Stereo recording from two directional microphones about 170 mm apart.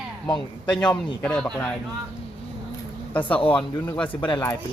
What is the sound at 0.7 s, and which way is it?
Speech, 5° left (ahead or behind).